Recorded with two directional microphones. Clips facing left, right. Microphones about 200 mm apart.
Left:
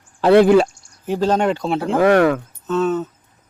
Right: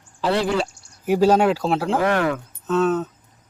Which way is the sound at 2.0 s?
55° left (ahead or behind).